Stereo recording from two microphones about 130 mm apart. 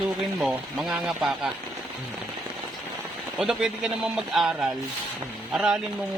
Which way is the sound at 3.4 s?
5° right (ahead or behind).